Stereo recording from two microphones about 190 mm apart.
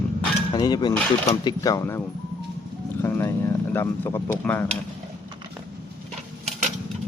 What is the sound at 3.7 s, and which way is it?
Speech, 15° left (ahead or behind).